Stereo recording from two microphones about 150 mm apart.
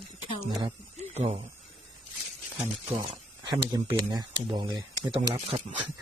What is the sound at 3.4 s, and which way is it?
Speech, 30° right (ahead or behind).